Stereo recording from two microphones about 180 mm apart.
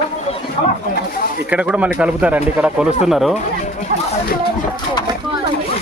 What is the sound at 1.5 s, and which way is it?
A man's voice, 5° right (ahead or behind).